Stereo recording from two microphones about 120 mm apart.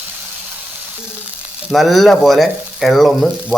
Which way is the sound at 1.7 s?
Centre (ahead or behind).